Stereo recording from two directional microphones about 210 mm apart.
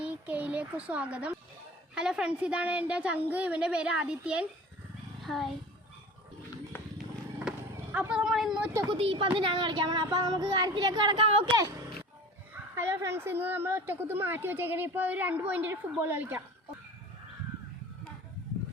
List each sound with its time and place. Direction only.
0.0 s a sound: 5° right (ahead or behind)
2.0 s a woman's voice: 5° right (ahead or behind)
6.7 s run: 10° left (ahead or behind)
7.9 s a woman's voice: 5° right (ahead or behind)
8.9 s speech: 25° right (ahead or behind)
12.7 s a woman's voice: 10° right (ahead or behind)